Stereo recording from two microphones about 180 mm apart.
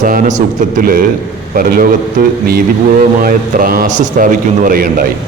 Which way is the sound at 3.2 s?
55° right (ahead or behind).